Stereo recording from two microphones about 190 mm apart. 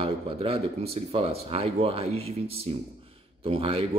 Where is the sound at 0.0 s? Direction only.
30° right (ahead or behind).